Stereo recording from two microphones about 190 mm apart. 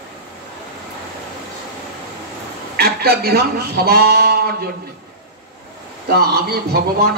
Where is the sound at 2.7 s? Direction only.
55° right (ahead or behind).